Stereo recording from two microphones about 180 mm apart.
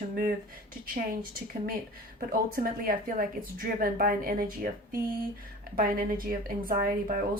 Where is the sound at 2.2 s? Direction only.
50° right (ahead or behind).